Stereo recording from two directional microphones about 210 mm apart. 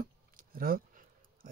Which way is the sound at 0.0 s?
45° right (ahead or behind).